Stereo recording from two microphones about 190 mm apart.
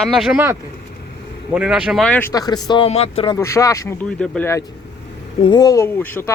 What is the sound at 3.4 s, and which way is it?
Speech, 15° left (ahead or behind).